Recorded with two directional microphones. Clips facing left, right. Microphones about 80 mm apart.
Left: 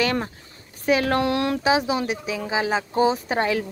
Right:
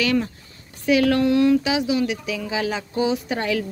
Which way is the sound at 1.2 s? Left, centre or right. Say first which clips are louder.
Right 6 dB; left.